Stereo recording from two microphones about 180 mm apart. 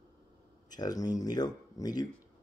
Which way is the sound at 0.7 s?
20° left (ahead or behind).